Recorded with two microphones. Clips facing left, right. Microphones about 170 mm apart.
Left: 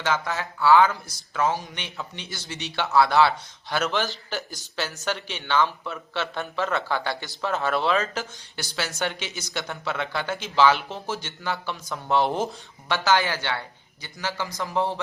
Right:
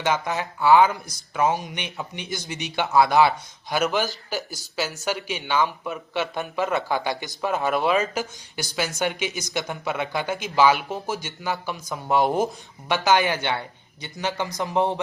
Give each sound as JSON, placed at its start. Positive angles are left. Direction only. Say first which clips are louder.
{"t": 0.0, "sound": "a man's voice", "louder": "right 2 dB", "side_deg": -15}